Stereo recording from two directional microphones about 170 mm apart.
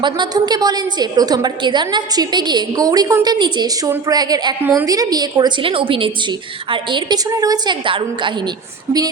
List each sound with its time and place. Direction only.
0.0 s a woman's voice: 25° right (ahead or behind)